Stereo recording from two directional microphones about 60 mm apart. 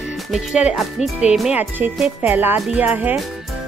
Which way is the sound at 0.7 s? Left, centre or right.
Centre.